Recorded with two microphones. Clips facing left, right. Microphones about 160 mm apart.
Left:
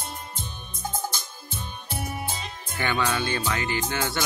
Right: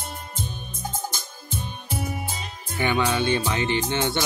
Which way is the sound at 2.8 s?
15° right (ahead or behind).